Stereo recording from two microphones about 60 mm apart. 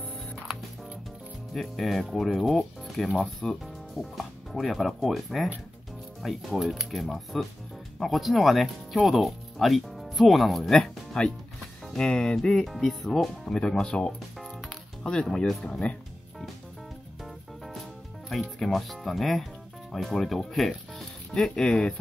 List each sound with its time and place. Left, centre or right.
1.5 s speech: centre
14.4 s music: centre
15.0 s speech: centre
18.3 s speech: centre